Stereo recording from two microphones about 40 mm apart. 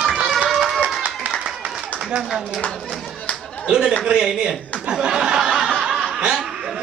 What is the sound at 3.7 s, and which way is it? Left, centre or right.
Speech, right.